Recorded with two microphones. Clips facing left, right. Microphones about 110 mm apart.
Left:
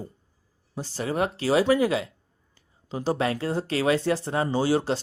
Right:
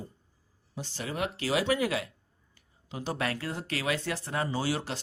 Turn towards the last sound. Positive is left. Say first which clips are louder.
# left 8 dB
turn(degrees=30)  # may be behind; listen again after turning